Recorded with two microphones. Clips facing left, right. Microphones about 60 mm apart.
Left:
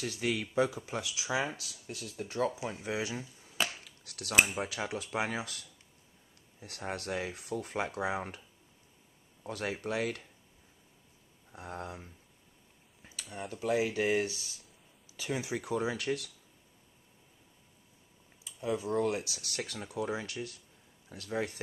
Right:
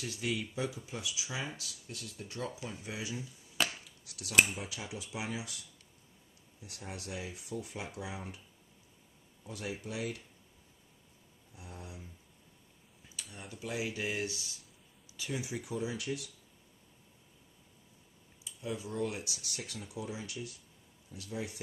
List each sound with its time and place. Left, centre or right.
0.0 s speech: left
3.5 s a sound: centre
3.8 s cutlery: left
4.6 s speech: left
4.8 s speech: left
9.4 s speech: left
11.5 s speech: left
13.0 s a sound: left
13.3 s speech: left
18.4 s speech: left
19.9 s speech: left